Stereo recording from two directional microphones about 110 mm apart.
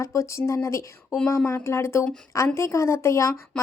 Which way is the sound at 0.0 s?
25° left (ahead or behind).